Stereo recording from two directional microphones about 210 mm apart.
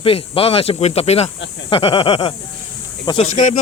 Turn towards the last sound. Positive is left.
turn(degrees=35)  # may be behind; listen again after turning